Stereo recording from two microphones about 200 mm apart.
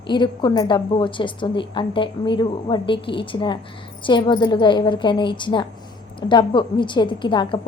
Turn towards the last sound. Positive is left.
turn(degrees=25)  # may be behind; listen again after turning